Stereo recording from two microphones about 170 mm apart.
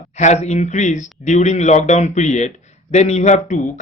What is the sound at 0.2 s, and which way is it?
A man's voice, 40° left (ahead or behind).